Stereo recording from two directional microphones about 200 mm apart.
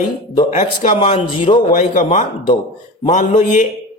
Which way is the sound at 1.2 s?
25° left (ahead or behind).